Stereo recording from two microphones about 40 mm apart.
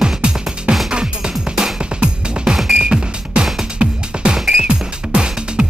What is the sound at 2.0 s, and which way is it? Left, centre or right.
Music, right.